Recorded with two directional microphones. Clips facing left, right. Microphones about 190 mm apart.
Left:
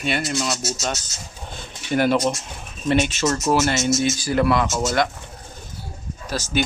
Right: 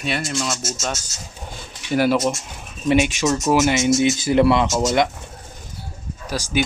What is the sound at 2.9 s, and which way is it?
Speech, 15° right (ahead or behind).